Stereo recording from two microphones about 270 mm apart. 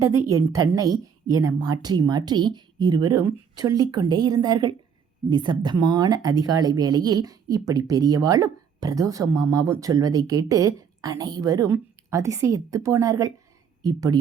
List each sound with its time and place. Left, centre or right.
0.5 s speech: centre